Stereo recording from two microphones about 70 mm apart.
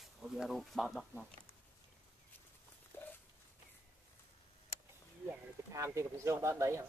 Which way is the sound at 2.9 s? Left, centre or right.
Left.